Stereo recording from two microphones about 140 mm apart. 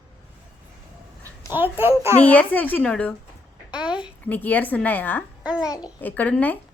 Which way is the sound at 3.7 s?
5° right (ahead or behind).